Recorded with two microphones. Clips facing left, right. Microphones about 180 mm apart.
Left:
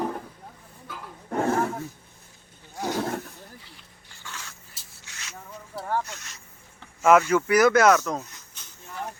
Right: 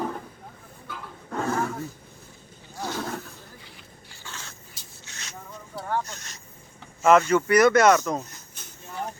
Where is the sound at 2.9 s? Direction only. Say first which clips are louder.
Left 4 dB; 25° left (ahead or behind).